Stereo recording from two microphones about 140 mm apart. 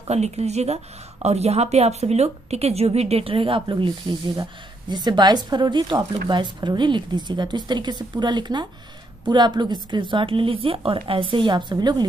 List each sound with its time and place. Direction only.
0.1 s a woman's voice: 50° right (ahead or behind); by 12.1 s 30° right (ahead or behind)